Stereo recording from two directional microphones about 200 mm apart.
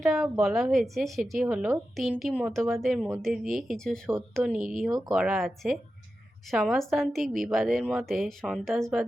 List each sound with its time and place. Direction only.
0.0 s a woman's voice: centre (ahead or behind)